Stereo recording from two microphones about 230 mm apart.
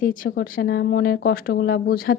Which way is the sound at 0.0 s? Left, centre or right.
Left.